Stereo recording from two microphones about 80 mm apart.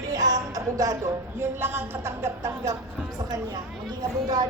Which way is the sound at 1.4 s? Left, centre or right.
Right.